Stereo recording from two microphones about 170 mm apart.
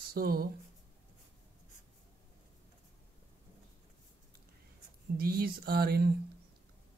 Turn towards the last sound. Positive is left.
turn(degrees=-65)  # may be behind; listen again after turning